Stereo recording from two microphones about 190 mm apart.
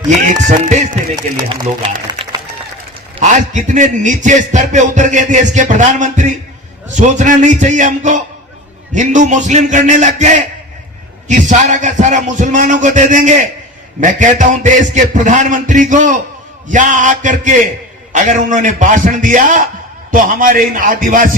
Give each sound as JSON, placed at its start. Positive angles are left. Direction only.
{"t": 0.3, "sound": "a man's voice", "side_deg": -40}
{"t": 3.2, "sound": "a man's voice", "side_deg": -40}